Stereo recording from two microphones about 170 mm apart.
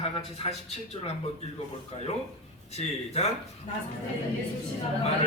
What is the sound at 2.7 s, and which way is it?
Speech, 40° left (ahead or behind).